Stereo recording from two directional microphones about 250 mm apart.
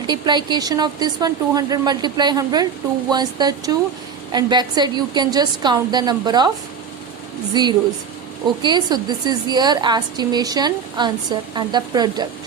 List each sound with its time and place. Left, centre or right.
0.1 s speech: centre
7.5 s speech: centre